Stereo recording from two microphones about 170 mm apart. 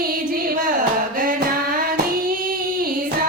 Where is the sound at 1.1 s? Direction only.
55° right (ahead or behind).